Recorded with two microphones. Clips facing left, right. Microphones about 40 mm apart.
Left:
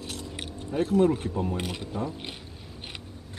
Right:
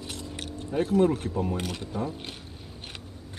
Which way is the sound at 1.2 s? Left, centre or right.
Centre.